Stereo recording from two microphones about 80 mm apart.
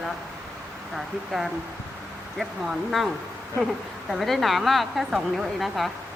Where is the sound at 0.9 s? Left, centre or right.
Centre.